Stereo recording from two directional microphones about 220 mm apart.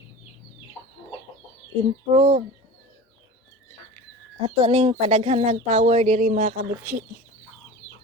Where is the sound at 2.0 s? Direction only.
25° right (ahead or behind).